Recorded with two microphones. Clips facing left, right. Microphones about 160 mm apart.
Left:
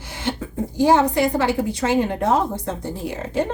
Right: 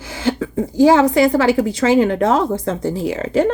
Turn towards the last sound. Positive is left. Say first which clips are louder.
# right 7 dB
turn(degrees=-90)